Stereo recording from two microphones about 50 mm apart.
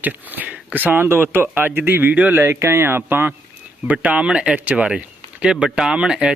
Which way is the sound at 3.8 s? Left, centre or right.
Right.